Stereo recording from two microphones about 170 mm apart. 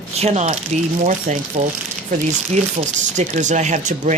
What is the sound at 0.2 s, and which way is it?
Speech, 40° right (ahead or behind).